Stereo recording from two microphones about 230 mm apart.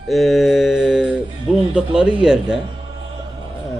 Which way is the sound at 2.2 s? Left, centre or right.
Centre.